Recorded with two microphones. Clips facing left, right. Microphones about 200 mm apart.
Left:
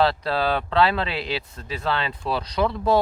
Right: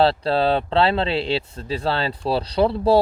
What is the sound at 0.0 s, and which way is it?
Speech, 30° right (ahead or behind).